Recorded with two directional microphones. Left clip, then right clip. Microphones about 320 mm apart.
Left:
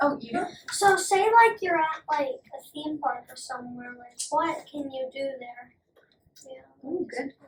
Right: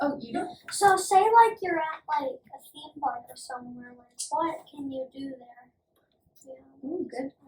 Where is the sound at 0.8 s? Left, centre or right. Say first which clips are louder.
Right 1 dB; centre.